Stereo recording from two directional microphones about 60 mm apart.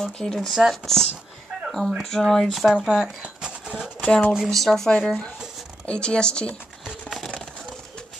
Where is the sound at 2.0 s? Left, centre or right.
Centre.